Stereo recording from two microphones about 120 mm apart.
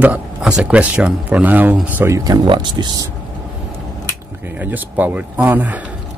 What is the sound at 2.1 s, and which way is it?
Speech, 30° right (ahead or behind).